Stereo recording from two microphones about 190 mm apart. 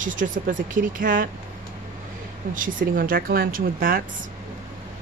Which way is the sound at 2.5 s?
45° right (ahead or behind).